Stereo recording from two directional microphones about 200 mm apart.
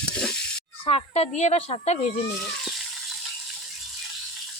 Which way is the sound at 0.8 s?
30° left (ahead or behind).